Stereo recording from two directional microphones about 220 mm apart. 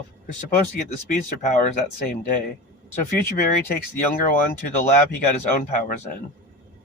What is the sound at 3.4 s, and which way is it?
Speech, 45° left (ahead or behind).